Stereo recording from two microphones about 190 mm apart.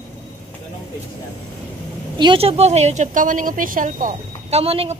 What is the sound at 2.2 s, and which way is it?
A woman's voice, 25° right (ahead or behind).